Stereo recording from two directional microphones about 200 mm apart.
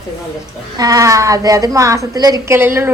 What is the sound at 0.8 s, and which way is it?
A woman's voice, 15° right (ahead or behind).